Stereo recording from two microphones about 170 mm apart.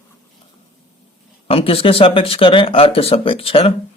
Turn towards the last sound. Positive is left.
turn(degrees=35)  # may be behind; listen again after turning